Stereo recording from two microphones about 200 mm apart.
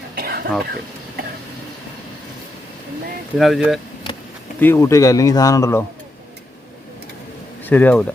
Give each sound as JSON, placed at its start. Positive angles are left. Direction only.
{"t": 0.2, "sound": "whispering", "side_deg": -50}
{"t": 3.3, "sound": "speech", "side_deg": 0}
{"t": 4.6, "sound": "speech", "side_deg": 15}
{"t": 7.6, "sound": "speech", "side_deg": 10}